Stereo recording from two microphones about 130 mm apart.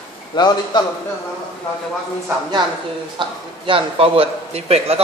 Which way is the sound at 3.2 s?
40° right (ahead or behind).